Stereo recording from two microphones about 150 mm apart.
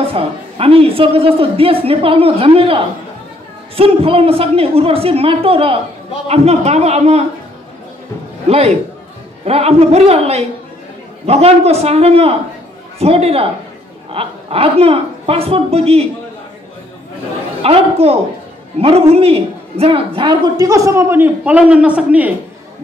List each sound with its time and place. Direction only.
0.0 s a woman's voice: 40° right (ahead or behind)
8.5 s a man's voice: 45° right (ahead or behind)
17.6 s a woman's voice: 40° right (ahead or behind)
20.2 s a man's voice: 30° right (ahead or behind); by 22.3 s 10° right (ahead or behind)